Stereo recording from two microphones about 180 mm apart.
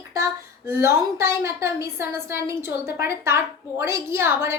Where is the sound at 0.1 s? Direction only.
15° right (ahead or behind).